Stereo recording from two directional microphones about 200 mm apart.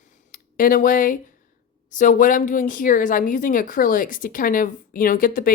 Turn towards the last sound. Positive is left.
turn(degrees=45)  # may be behind; listen again after turning